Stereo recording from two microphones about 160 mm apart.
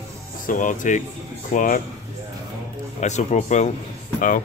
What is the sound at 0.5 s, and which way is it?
Speech, 55° left (ahead or behind).